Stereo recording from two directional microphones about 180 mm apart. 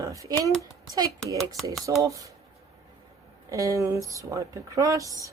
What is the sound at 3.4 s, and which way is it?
Speech, 20° right (ahead or behind).